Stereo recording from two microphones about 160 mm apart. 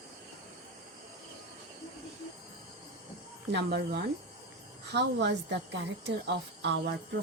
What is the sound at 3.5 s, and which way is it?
A woman's voice, 90° right.